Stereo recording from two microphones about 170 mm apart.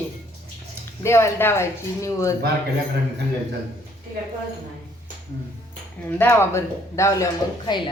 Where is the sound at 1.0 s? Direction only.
15° left (ahead or behind).